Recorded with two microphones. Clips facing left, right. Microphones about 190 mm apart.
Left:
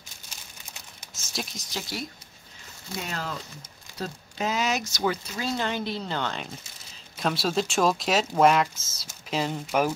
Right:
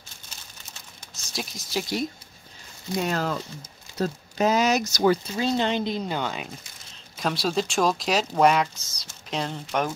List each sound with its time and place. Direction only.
1.2 s speech: centre (ahead or behind)
1.8 s speech: 20° right (ahead or behind)
3.1 s speech: 45° right (ahead or behind)
5.4 s speech: 25° right (ahead or behind); by 9.9 s 5° left (ahead or behind)